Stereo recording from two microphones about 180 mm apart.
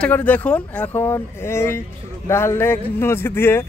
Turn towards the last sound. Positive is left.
turn(degrees=10)  # may be behind; listen again after turning